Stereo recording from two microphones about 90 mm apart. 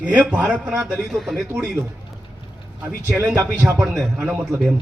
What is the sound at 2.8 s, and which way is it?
A man's voice, 30° right (ahead or behind).